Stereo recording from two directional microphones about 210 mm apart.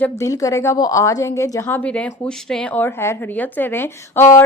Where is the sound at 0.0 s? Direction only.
15° left (ahead or behind).